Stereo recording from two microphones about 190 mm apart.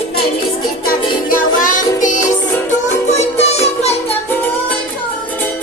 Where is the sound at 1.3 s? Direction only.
45° left (ahead or behind).